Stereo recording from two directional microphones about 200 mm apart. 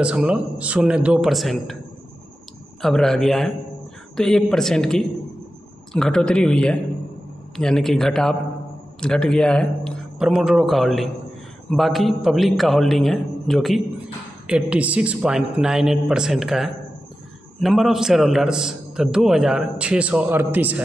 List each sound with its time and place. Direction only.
0.0 s a man's voice: 5° right (ahead or behind)
2.8 s a man's voice: centre (ahead or behind)